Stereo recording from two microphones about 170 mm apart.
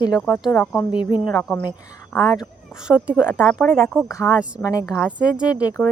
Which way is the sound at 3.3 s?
5° left (ahead or behind).